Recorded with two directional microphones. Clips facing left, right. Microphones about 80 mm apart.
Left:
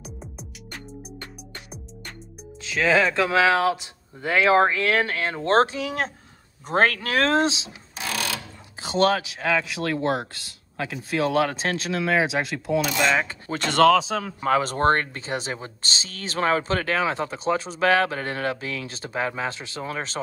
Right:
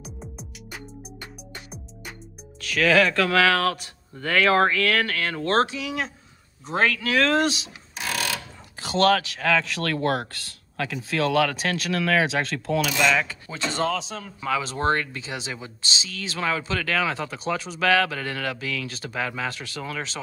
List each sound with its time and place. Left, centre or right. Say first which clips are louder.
0.0 s music: even; centre
2.6 s speech: right 1 dB; left
8.8 s speech: right 1 dB; left
12.8 s speech: right 2 dB; left
13.7 s speech: left 9 dB; left
14.4 s speech: left 4 dB; left